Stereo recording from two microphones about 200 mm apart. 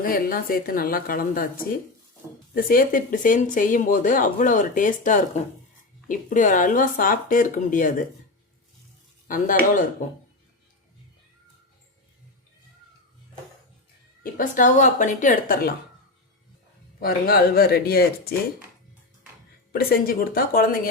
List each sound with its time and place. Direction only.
0.0 s a woman's voice: 45° left (ahead or behind)
9.2 s speech: 40° left (ahead or behind)
14.3 s speech: 40° left (ahead or behind)
17.0 s a woman's voice: 50° left (ahead or behind)
19.7 s a woman's voice: 50° left (ahead or behind)